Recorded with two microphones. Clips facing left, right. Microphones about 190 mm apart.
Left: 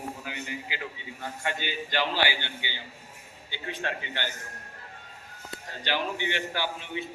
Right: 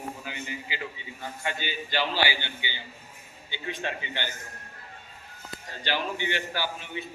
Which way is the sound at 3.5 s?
15° right (ahead or behind).